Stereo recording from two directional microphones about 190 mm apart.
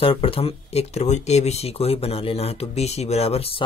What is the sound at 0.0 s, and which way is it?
Speech, 30° left (ahead or behind).